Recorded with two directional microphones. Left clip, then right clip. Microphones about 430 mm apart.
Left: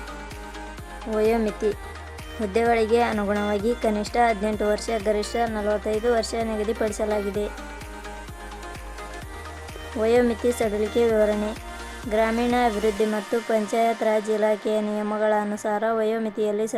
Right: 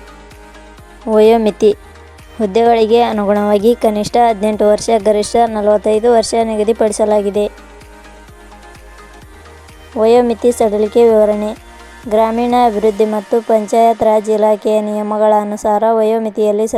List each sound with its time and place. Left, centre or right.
1.1 s speech: centre
10.0 s speech: centre